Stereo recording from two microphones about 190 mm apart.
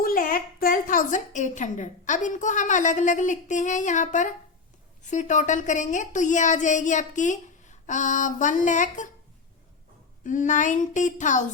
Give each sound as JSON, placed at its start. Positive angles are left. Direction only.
{"t": 0.0, "sound": "a woman's voice", "side_deg": 50}
{"t": 10.2, "sound": "a woman's voice", "side_deg": 40}